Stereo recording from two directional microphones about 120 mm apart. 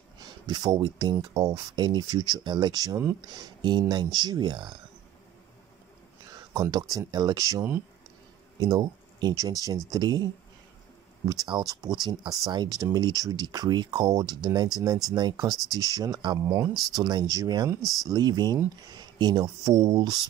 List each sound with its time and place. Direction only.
0.2 s speech: 35° right (ahead or behind)
6.5 s speech: 30° right (ahead or behind)